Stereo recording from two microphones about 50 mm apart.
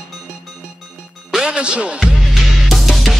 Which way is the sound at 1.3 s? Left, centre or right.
Right.